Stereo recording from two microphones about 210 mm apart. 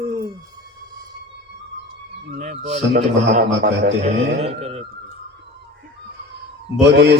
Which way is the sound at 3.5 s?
55° right (ahead or behind).